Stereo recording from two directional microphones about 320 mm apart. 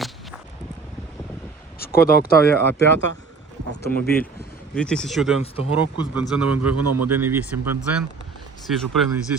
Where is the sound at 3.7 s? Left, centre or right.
Left.